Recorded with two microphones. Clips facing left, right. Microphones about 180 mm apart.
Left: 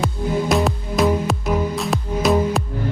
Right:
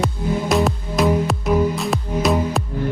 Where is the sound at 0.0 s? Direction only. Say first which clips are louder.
Even; centre (ahead or behind).